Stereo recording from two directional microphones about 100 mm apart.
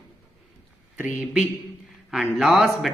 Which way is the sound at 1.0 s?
20° right (ahead or behind).